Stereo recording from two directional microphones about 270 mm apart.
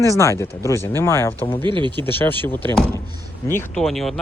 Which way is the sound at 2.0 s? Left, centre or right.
Centre.